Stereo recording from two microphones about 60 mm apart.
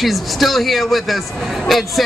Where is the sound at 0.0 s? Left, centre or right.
Centre.